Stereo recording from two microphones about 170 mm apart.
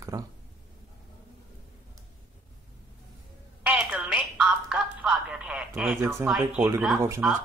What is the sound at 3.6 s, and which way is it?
Telephone, 5° right (ahead or behind).